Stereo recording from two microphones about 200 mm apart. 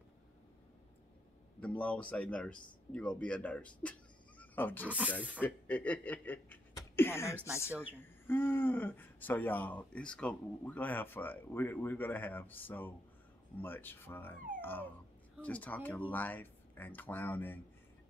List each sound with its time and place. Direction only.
1.6 s speech: 5° left (ahead or behind)
4.4 s wild animals: 10° left (ahead or behind)
4.8 s speech: 5° right (ahead or behind)
5.4 s speech: 5° left (ahead or behind)
14.6 s dog: 10° left (ahead or behind)
15.4 s speech: 5° left (ahead or behind)